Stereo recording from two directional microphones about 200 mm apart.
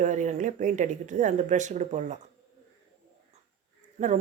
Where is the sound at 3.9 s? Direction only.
35° right (ahead or behind).